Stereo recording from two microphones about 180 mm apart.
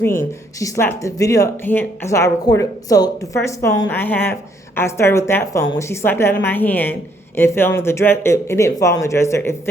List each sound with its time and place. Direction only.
0.0 s speech: 15° left (ahead or behind)